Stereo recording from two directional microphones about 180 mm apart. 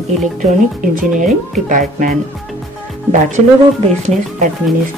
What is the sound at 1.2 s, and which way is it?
Speech, 45° right (ahead or behind).